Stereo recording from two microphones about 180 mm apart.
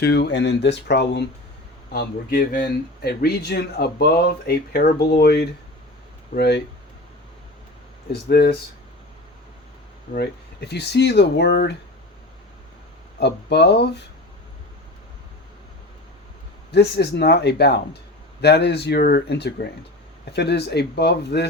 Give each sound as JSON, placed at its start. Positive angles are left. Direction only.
{"t": 0.0, "sound": "speech", "side_deg": 70}
{"t": 1.9, "sound": "speech", "side_deg": 55}
{"t": 8.1, "sound": "speech", "side_deg": 60}
{"t": 10.2, "sound": "speech", "side_deg": 65}
{"t": 13.1, "sound": "speech", "side_deg": 70}
{"t": 16.7, "sound": "speech", "side_deg": 65}